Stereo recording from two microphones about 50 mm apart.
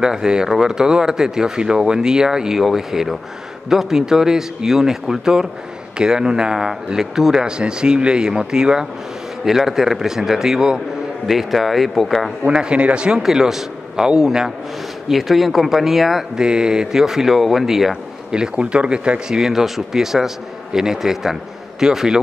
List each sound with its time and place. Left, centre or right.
0.0 s speech: centre
12.4 s a man's voice: right
13.2 s speech: centre
18.3 s speech: centre